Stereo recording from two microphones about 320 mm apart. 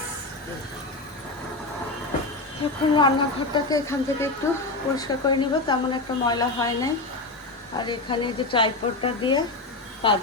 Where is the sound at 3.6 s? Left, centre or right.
Centre.